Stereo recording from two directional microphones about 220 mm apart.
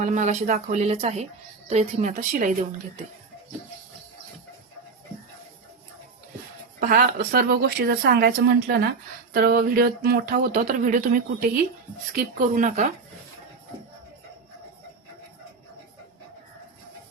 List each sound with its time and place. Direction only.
0.0 s speech: 35° right (ahead or behind)
6.7 s speech: 40° right (ahead or behind)